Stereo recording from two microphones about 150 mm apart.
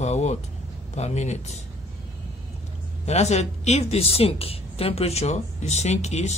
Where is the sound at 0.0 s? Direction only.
45° left (ahead or behind).